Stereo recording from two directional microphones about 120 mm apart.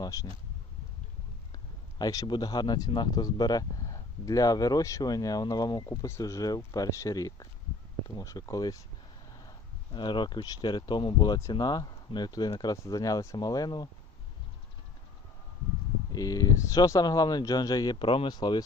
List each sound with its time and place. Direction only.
0.0 s speech: 25° left (ahead or behind)
1.5 s speech: 30° left (ahead or behind)
16.1 s speech: 30° left (ahead or behind)